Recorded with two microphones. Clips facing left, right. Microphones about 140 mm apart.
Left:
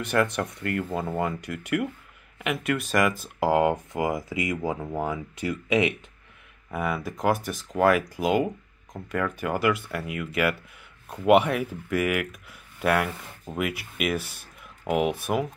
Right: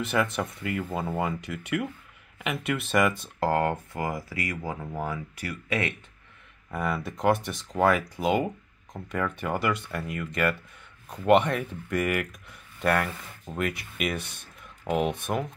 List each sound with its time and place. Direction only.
0.0 s speech: centre (ahead or behind)
3.3 s speech: 10° left (ahead or behind)
6.7 s speech: 5° left (ahead or behind)